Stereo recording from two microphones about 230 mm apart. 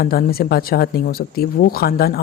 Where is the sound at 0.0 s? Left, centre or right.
Left.